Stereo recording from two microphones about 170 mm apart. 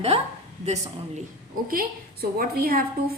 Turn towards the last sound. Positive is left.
turn(degrees=-60)  # may be behind; listen again after turning